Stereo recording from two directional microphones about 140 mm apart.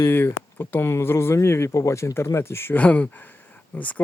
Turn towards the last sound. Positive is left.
turn(degrees=10)  # may be behind; listen again after turning